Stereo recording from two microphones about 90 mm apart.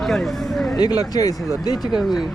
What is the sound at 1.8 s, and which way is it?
Speech, centre (ahead or behind).